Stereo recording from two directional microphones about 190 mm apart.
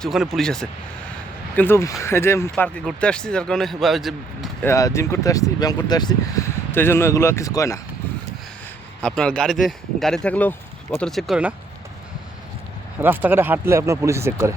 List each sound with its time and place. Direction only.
0.0 s speech: centre (ahead or behind)
4.6 s speech: 15° left (ahead or behind)
9.0 s speech: 5° left (ahead or behind)
13.0 s speech: 10° right (ahead or behind)